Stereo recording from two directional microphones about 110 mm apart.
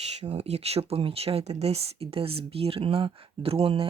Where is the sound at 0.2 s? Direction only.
80° right.